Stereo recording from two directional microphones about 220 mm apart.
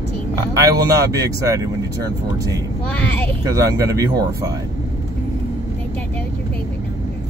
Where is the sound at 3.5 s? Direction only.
15° right (ahead or behind).